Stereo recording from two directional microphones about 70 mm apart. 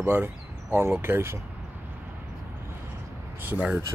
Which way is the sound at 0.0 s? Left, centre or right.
Right.